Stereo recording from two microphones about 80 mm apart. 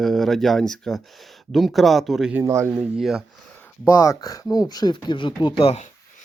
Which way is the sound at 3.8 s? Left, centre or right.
Left.